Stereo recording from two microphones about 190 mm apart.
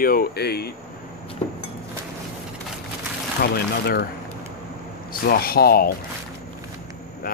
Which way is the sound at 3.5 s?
55° left (ahead or behind).